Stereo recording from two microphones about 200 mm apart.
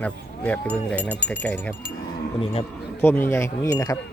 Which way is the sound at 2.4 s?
30° left (ahead or behind).